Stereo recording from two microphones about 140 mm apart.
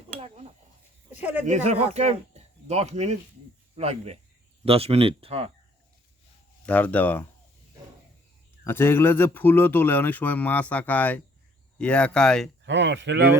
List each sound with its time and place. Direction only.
1.1 s speech: 10° right (ahead or behind)
1.5 s speech: 55° right (ahead or behind)
6.7 s speech: 10° left (ahead or behind)
8.6 s speech: 15° left (ahead or behind)